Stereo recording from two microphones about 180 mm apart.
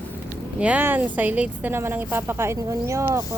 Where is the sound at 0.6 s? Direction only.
10° right (ahead or behind).